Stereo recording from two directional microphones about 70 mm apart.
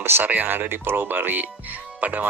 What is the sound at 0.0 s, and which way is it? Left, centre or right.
Speech, right.